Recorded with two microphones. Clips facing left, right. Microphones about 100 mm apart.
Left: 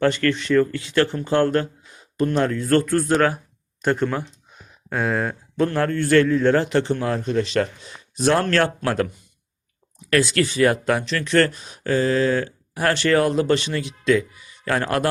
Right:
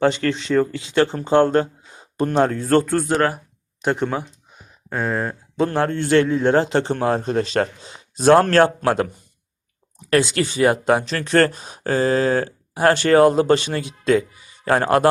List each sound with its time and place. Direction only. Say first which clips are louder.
0.0 s speech: right 1 dB; 20° right (ahead or behind)
3.1 s speech: left 1 dB; 5° right (ahead or behind)
4.9 s speech: even; centre (ahead or behind)
5.6 s speech: even; 25° right (ahead or behind)
10.1 s speech: right 1 dB; 25° right (ahead or behind)
11.1 s speech: right 2 dB; 40° right (ahead or behind)